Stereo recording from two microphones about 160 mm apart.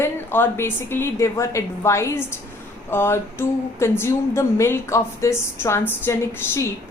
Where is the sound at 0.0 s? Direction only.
15° left (ahead or behind).